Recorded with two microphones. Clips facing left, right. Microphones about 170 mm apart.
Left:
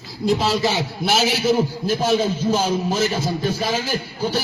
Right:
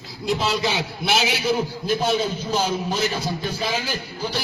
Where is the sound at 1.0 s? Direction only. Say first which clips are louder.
Left 3 dB; 40° left (ahead or behind).